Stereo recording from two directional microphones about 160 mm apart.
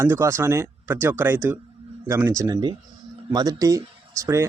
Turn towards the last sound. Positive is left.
turn(degrees=-20)  # may be behind; listen again after turning